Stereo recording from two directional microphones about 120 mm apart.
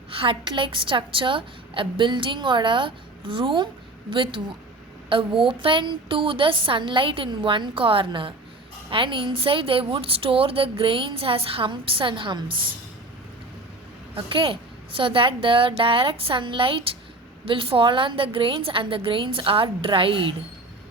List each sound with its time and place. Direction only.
0.2 s a woman's voice: 45° right (ahead or behind)
14.2 s a woman's voice: 45° right (ahead or behind)